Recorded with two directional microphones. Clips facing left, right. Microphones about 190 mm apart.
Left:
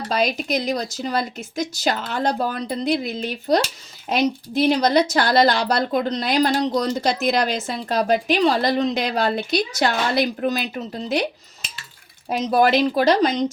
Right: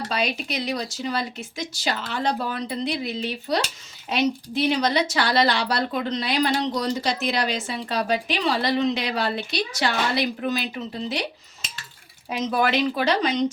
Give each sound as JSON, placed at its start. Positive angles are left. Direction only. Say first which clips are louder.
{"t": 0.1, "sound": "a woman's voice", "louder": "left 7 dB", "side_deg": 40}
{"t": 12.5, "sound": "speech", "louder": "left 5 dB", "side_deg": 40}